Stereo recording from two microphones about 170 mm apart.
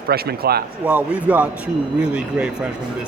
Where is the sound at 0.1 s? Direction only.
70° right (ahead or behind).